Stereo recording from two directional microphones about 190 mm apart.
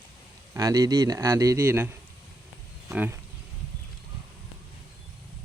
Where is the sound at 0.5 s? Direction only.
15° right (ahead or behind).